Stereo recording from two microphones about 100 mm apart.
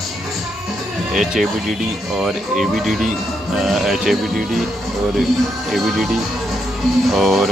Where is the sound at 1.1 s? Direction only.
5° right (ahead or behind).